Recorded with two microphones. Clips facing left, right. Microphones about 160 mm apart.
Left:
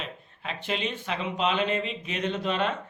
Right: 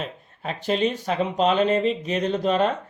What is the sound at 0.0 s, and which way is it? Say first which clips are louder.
Speech: right 6 dB; 40° right (ahead or behind).